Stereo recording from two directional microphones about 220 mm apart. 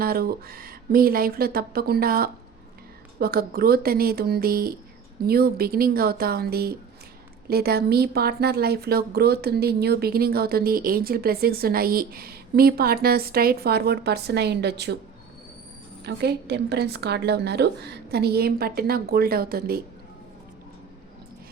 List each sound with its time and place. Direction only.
0.0 s a woman's voice: 45° right (ahead or behind)
16.0 s a woman's voice: 50° right (ahead or behind)